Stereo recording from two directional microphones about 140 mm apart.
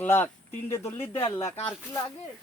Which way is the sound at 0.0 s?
15° left (ahead or behind).